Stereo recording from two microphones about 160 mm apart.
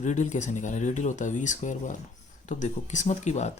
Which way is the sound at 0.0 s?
50° left (ahead or behind).